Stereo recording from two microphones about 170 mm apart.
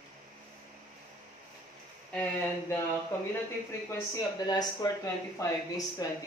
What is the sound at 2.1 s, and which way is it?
Speech, 10° left (ahead or behind).